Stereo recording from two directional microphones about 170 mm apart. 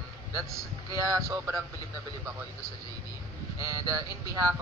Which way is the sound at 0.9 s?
20° right (ahead or behind).